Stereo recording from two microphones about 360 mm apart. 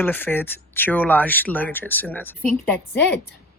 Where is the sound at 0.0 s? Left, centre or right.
Centre.